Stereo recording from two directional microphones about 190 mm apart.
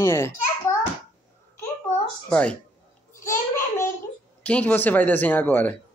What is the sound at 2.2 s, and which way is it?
Speech, 5° left (ahead or behind).